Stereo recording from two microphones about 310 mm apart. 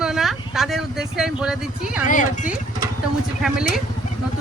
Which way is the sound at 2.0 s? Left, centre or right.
Left.